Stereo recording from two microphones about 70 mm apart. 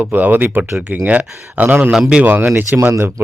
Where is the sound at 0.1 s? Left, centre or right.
Right.